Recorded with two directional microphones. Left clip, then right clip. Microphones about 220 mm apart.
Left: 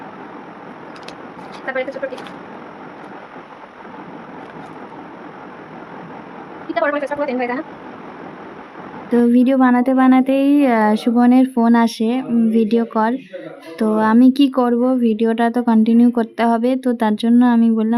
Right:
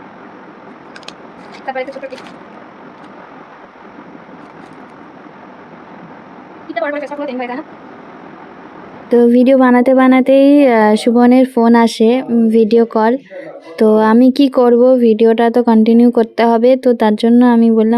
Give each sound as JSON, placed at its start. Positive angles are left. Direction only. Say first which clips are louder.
{"t": 1.6, "sound": "a woman's voice", "louder": "right 1 dB", "side_deg": 10}
{"t": 6.7, "sound": "a woman's voice", "louder": "left 1 dB", "side_deg": 15}
{"t": 9.0, "sound": "speech", "louder": "right 6 dB", "side_deg": -15}